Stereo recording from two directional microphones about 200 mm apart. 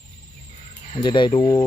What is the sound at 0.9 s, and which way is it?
Speech, 25° left (ahead or behind).